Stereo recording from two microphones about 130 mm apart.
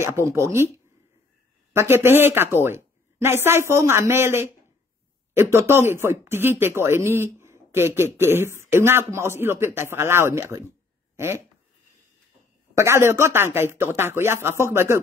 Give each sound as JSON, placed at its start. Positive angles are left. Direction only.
{"t": 0.0, "sound": "speech", "side_deg": -20}
{"t": 12.7, "sound": "speech", "side_deg": -20}